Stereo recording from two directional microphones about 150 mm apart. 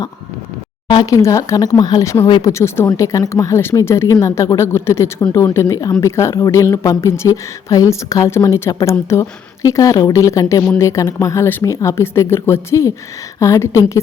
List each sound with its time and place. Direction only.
0.9 s speech: 25° left (ahead or behind)